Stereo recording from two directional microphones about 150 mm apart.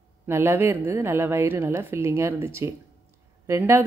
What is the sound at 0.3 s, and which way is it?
A woman's voice, 15° right (ahead or behind).